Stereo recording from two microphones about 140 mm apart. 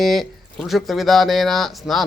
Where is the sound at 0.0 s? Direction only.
Centre (ahead or behind).